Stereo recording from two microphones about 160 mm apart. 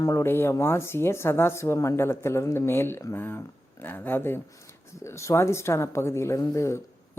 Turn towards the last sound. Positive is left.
turn(degrees=20)  # may be behind; listen again after turning